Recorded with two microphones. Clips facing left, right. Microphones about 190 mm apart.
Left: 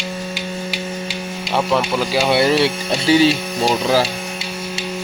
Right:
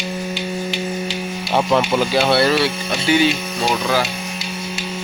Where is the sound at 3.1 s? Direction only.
35° left (ahead or behind).